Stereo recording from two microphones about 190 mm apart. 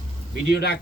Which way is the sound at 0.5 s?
60° left (ahead or behind).